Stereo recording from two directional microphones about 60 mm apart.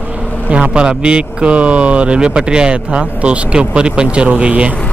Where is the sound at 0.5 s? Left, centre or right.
Centre.